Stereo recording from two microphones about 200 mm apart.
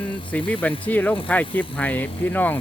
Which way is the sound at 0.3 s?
10° left (ahead or behind).